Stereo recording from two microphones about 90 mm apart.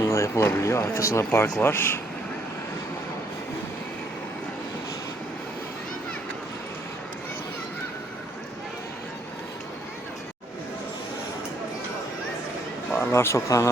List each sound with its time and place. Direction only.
0.0 s speech: 35° left (ahead or behind)
13.0 s speech: 30° left (ahead or behind)